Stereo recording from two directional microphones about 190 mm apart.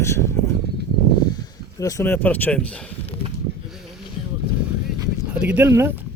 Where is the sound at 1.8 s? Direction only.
15° left (ahead or behind).